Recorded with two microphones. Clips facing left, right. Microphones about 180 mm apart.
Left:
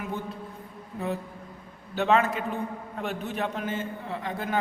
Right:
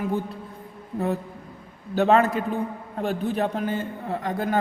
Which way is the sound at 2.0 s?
40° right (ahead or behind).